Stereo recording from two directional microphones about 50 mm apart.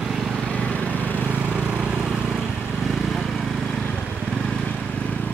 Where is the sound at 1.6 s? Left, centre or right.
Right.